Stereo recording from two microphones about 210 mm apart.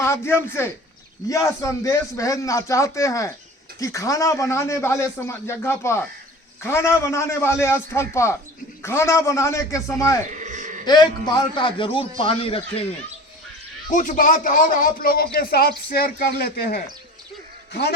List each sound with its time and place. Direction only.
0.0 s a man's voice: 10° left (ahead or behind)
10.3 s sheep: 35° right (ahead or behind)
10.8 s a man's voice: 20° left (ahead or behind)
13.9 s a man's voice: 40° left (ahead or behind); by 17.9 s 55° left (ahead or behind)